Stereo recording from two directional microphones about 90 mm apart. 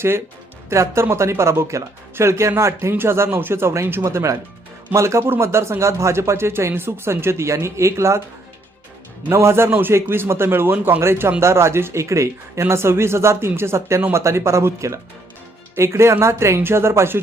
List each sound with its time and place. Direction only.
0.7 s a man's voice: 30° right (ahead or behind)
9.3 s a man's voice: 30° right (ahead or behind)